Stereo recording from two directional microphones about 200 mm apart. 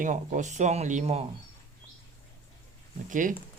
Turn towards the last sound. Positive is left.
turn(degrees=-40)  # may be behind; listen again after turning